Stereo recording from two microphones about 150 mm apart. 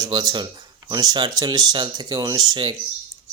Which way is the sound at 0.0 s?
25° right (ahead or behind).